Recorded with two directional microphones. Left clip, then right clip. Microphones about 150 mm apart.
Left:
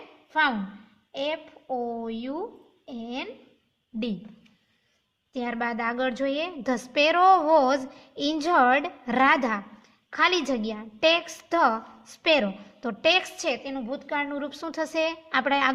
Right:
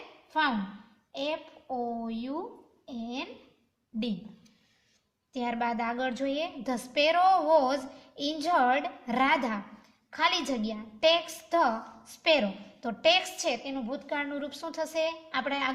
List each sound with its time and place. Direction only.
0.3 s a woman's voice: 65° left (ahead or behind)
5.3 s a woman's voice: 35° left (ahead or behind)